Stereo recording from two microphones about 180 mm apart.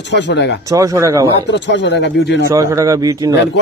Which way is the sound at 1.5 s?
85° left.